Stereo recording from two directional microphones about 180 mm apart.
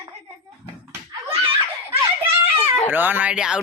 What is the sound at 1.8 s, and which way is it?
Children playing, 15° right (ahead or behind).